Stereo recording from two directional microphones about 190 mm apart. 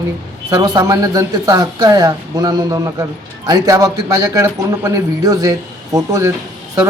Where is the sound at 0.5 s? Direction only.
20° right (ahead or behind).